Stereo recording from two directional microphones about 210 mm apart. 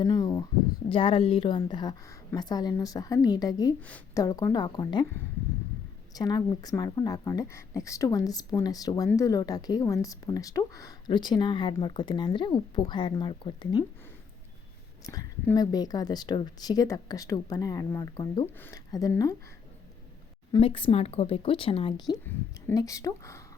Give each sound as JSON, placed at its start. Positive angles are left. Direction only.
{"t": 0.0, "sound": "a sound", "side_deg": 20}
{"t": 0.9, "sound": "a woman's voice", "side_deg": 25}
{"t": 3.8, "sound": "a woman's voice", "side_deg": 5}
{"t": 6.1, "sound": "a woman's voice", "side_deg": 20}
{"t": 15.0, "sound": "a woman's voice", "side_deg": 15}
{"t": 20.5, "sound": "a woman's voice", "side_deg": 25}